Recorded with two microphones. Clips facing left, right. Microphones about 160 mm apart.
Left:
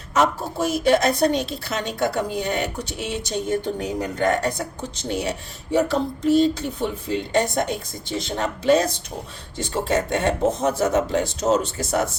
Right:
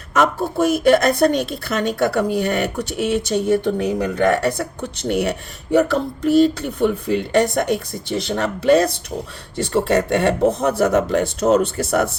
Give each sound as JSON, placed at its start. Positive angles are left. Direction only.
{"t": 0.1, "sound": "a woman's voice", "side_deg": -55}